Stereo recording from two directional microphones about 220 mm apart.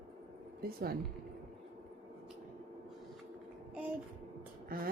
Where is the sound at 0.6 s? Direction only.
45° right (ahead or behind).